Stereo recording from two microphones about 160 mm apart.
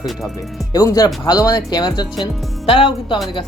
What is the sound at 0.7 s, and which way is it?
Speech, 25° left (ahead or behind).